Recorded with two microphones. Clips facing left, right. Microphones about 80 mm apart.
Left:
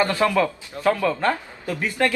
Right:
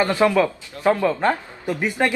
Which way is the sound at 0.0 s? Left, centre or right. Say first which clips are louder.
Right 2 dB; centre.